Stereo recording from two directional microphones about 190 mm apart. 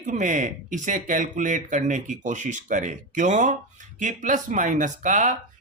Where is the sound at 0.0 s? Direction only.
40° right (ahead or behind).